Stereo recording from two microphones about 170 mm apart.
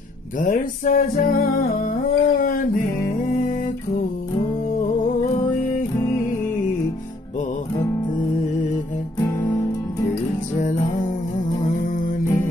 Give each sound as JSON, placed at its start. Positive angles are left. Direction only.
{"t": 0.4, "sound": "music", "side_deg": 55}
{"t": 1.9, "sound": "a sound", "side_deg": 55}
{"t": 3.3, "sound": "music", "side_deg": 55}
{"t": 10.6, "sound": "music", "side_deg": 50}